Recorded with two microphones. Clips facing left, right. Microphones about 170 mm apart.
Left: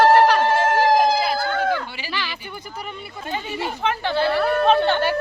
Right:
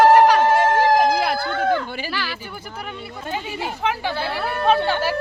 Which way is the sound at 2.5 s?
Centre (ahead or behind).